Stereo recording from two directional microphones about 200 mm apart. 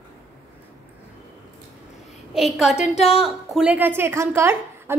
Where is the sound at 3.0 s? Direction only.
30° left (ahead or behind).